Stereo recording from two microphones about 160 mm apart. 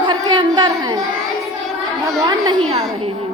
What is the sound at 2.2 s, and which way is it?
Speech, 25° right (ahead or behind).